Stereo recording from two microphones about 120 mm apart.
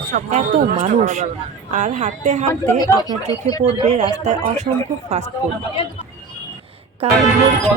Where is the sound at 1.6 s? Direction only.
80° right.